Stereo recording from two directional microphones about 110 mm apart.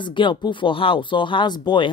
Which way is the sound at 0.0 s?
45° left (ahead or behind).